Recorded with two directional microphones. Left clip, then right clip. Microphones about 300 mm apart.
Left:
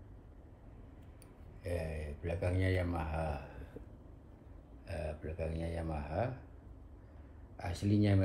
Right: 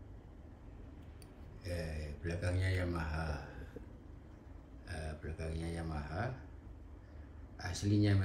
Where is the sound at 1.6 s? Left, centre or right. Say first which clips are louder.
Left 4 dB; centre.